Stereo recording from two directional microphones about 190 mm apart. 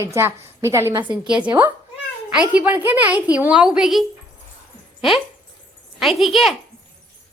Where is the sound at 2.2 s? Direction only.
5° right (ahead or behind).